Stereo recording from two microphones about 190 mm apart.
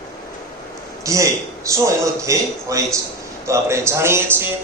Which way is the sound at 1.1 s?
15° right (ahead or behind).